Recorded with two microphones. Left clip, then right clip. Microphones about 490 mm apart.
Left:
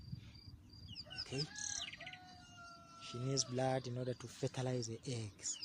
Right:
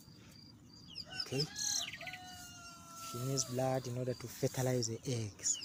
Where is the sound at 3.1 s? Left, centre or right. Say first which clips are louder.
Right 1 dB; left.